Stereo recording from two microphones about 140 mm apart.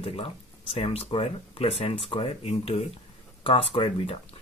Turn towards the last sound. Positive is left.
turn(degrees=40)  # may be behind; listen again after turning